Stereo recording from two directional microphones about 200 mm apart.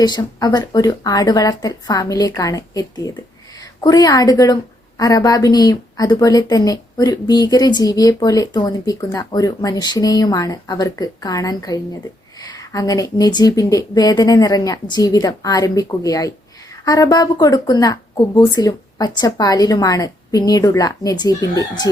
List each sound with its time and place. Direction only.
0.0 s a woman's voice: 20° left (ahead or behind)